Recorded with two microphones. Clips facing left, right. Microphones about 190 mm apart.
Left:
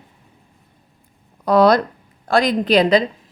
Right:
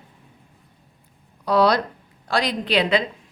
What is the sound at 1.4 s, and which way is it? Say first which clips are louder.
Speech: left 5 dB; 50° left (ahead or behind).